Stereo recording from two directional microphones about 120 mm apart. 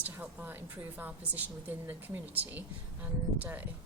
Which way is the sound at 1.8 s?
15° right (ahead or behind).